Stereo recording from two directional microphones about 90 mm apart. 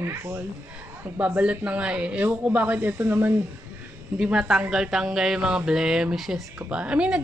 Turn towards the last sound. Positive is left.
turn(degrees=-10)  # may be behind; listen again after turning